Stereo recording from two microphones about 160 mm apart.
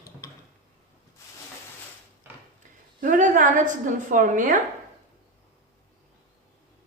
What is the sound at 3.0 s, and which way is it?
A woman's voice, 55° right (ahead or behind).